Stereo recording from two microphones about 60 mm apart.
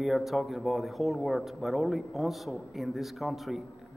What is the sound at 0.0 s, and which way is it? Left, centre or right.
A man's voice, centre.